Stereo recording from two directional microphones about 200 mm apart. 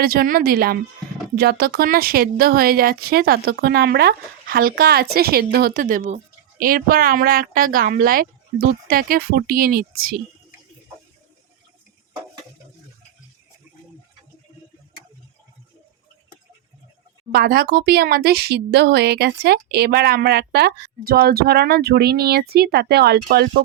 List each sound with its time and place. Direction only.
0.0 s speech: 50° right (ahead or behind)
17.3 s speech: 50° right (ahead or behind)